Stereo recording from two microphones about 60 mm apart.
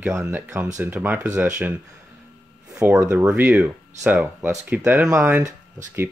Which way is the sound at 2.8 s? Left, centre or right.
Right.